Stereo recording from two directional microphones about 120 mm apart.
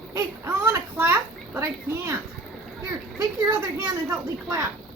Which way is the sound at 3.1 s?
25° right (ahead or behind).